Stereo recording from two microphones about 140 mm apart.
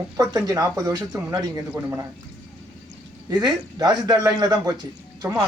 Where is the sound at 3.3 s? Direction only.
30° right (ahead or behind).